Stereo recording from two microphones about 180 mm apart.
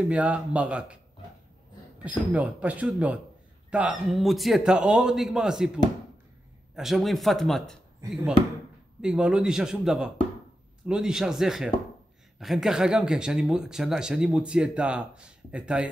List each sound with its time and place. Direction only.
0.1 s speech: 5° right (ahead or behind)
2.0 s speech: 10° right (ahead or behind)
6.7 s speech: centre (ahead or behind)
9.0 s speech: 5° right (ahead or behind)